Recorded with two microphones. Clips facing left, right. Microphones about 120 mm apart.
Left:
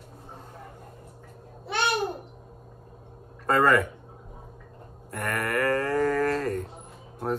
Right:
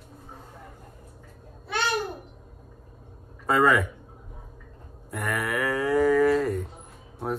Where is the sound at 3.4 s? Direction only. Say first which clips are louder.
Even; 5° right (ahead or behind).